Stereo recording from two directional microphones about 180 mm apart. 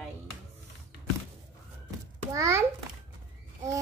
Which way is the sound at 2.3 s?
15° right (ahead or behind).